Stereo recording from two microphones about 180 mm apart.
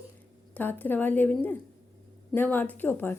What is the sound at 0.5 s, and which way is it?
A woman's voice, 10° left (ahead or behind).